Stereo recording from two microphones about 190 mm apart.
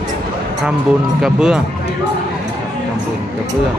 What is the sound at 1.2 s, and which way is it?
Speech, 5° right (ahead or behind).